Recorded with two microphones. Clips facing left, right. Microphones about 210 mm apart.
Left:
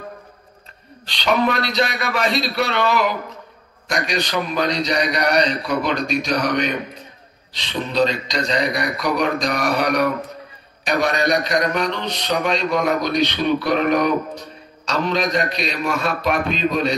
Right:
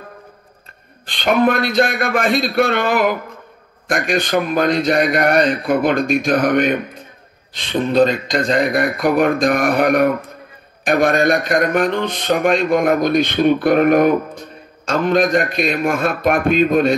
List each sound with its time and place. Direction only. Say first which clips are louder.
1.0 s a man's voice: right 4 dB; 50° right (ahead or behind)